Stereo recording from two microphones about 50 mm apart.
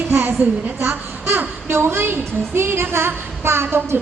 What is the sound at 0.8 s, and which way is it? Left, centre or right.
Speech, right.